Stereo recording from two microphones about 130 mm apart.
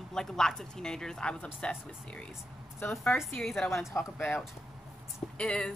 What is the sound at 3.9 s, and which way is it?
A woman's voice, 20° left (ahead or behind).